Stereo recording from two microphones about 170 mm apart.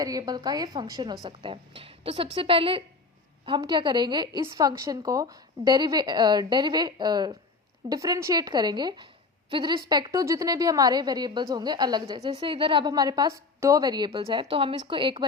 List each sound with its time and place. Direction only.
0.0 s a woman's voice: 20° right (ahead or behind)